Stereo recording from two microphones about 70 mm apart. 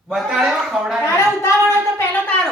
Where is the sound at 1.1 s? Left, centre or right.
Left.